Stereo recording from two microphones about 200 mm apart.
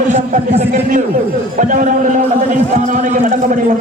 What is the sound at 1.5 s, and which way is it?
Speech, 40° right (ahead or behind).